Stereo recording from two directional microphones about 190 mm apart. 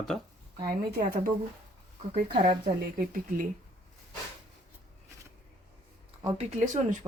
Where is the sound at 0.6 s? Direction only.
50° right (ahead or behind).